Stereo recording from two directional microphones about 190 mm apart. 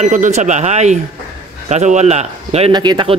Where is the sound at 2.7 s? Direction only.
20° right (ahead or behind).